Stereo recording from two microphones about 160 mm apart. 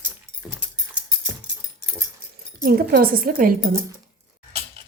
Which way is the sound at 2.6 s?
60° right (ahead or behind).